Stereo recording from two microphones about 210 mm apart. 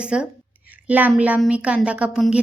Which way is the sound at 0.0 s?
5° right (ahead or behind).